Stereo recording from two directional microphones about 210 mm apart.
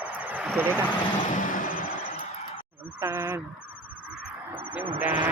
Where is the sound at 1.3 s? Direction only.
40° left (ahead or behind).